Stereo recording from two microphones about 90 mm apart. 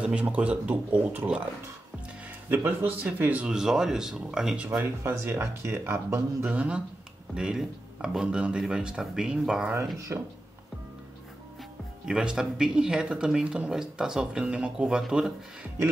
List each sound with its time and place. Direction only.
0.0 s speech: 15° right (ahead or behind)
2.5 s speech: 25° right (ahead or behind); by 4.6 s 5° right (ahead or behind)
5.0 s speech: 25° right (ahead or behind)
6.5 s speech: 15° right (ahead or behind)
9.9 s speech: 35° right (ahead or behind)
12.1 s speech: 5° right (ahead or behind)